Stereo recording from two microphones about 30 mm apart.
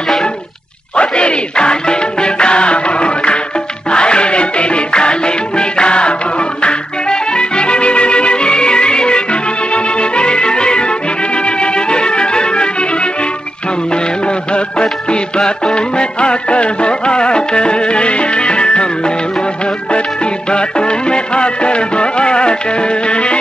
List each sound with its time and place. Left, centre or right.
0.9 s music: left
20.4 s music: left